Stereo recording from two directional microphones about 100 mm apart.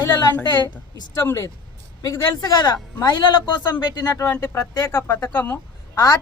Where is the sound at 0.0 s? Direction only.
40° left (ahead or behind).